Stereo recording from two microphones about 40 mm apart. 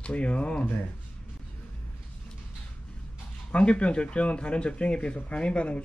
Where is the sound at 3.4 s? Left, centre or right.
Left.